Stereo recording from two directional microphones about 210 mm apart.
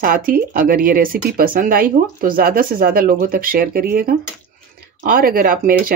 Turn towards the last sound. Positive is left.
turn(degrees=-40)  # may be behind; listen again after turning